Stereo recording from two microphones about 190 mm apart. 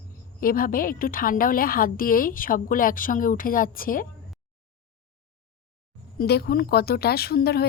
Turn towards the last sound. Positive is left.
turn(degrees=55)  # may be behind; listen again after turning